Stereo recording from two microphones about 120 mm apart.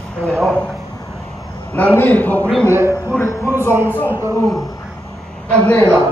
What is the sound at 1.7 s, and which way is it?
Speech, 15° left (ahead or behind).